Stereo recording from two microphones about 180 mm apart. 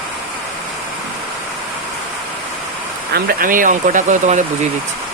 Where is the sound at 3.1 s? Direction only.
55° right (ahead or behind).